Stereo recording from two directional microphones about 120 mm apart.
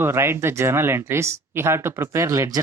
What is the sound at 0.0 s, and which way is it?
Speech, 20° right (ahead or behind).